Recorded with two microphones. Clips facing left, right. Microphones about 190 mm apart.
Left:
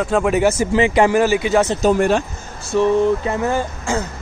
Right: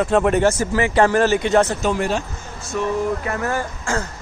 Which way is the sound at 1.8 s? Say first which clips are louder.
Left 6 dB; 45° left (ahead or behind).